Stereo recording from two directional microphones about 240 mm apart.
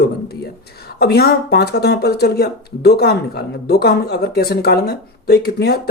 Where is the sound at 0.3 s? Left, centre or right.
Left.